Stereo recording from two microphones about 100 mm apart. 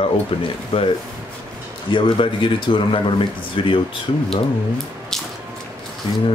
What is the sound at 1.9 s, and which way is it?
Speech, 55° left (ahead or behind).